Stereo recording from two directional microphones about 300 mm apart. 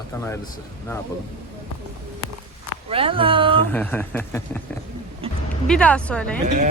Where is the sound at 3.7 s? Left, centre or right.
Centre.